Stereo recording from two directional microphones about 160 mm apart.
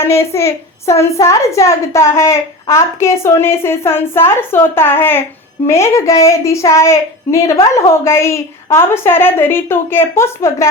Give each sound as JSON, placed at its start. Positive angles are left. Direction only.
{"t": 0.0, "sound": "a woman's voice", "side_deg": 15}